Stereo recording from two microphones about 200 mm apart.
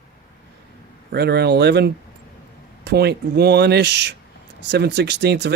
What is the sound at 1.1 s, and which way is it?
Speech, 55° right (ahead or behind).